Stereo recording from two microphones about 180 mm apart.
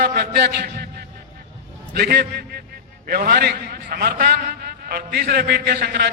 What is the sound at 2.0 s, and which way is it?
A man's voice, 60° right (ahead or behind).